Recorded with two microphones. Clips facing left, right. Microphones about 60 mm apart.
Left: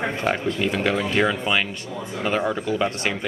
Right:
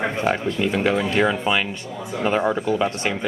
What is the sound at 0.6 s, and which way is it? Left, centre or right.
Speech, centre.